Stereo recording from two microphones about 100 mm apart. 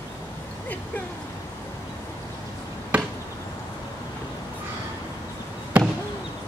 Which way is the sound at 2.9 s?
15° right (ahead or behind).